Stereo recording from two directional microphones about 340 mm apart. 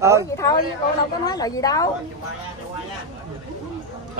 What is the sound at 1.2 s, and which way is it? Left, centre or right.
Speech, centre.